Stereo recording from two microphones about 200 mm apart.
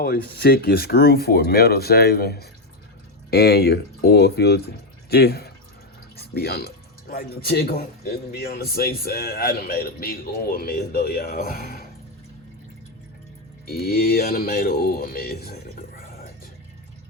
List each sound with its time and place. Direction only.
0.0 s speech: 50° left (ahead or behind)
13.7 s speech: 50° left (ahead or behind)